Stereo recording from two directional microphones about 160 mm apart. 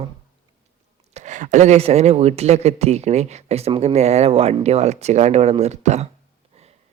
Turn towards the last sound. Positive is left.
turn(degrees=-45)  # may be behind; listen again after turning